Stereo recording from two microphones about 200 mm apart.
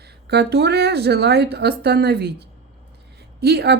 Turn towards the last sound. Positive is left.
turn(degrees=-55)  # may be behind; listen again after turning